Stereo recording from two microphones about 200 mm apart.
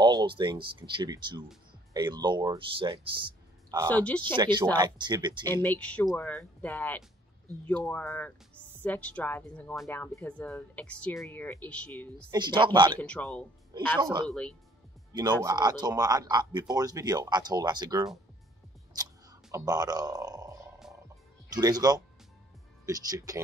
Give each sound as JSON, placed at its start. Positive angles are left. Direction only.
{"t": 0.0, "sound": "speech", "side_deg": -20}
{"t": 3.9, "sound": "speech", "side_deg": 5}
{"t": 4.4, "sound": "speech", "side_deg": -20}
{"t": 5.4, "sound": "speech", "side_deg": 10}
{"t": 12.3, "sound": "speech", "side_deg": -20}
{"t": 13.0, "sound": "speech", "side_deg": 5}
{"t": 14.0, "sound": "speech", "side_deg": -20}
{"t": 15.4, "sound": "speech", "side_deg": -20}
{"t": 19.5, "sound": "speech", "side_deg": -20}
{"t": 21.5, "sound": "speech", "side_deg": -20}